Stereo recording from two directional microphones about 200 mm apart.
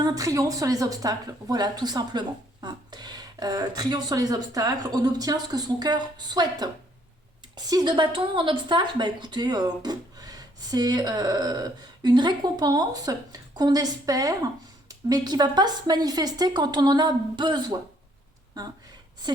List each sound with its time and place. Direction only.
0.0 s speech: 15° right (ahead or behind)